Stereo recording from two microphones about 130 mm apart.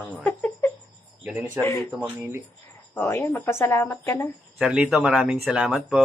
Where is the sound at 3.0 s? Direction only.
20° left (ahead or behind).